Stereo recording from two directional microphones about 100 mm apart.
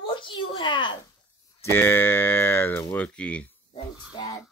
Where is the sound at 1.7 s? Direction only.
25° left (ahead or behind).